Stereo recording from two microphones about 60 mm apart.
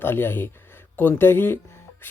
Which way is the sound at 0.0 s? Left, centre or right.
Left.